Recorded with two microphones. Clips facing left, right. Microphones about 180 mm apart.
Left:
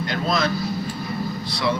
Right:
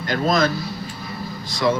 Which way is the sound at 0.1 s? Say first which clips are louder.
Right 5 dB; 45° right (ahead or behind).